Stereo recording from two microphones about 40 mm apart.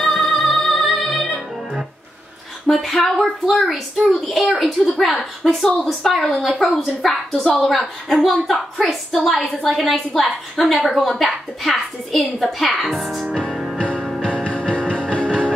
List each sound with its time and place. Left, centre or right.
0.3 s music: centre
2.7 s a woman's voice: centre
14.2 s music: left